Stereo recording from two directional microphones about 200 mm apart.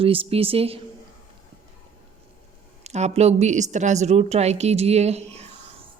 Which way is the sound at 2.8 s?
35° right (ahead or behind).